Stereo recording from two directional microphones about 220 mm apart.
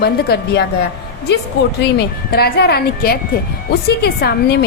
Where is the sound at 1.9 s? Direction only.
45° left (ahead or behind).